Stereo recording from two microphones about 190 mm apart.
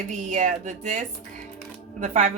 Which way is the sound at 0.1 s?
40° right (ahead or behind).